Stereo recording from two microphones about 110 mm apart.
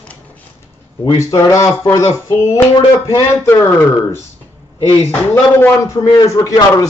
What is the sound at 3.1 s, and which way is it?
Speech, 30° left (ahead or behind).